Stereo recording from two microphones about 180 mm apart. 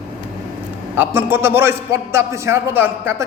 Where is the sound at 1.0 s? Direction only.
10° right (ahead or behind).